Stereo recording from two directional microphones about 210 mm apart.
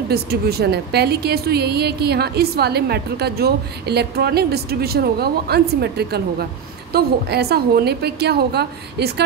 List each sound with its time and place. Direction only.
0.1 s a woman's voice: 50° right (ahead or behind)